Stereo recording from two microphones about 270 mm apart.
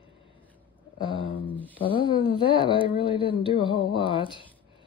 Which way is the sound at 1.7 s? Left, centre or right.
Centre.